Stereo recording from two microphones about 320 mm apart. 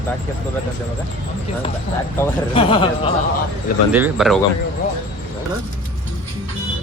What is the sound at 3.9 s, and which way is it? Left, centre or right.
Speech, centre.